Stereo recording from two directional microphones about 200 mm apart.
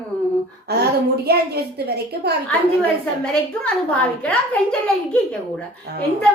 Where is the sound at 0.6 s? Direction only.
55° right (ahead or behind).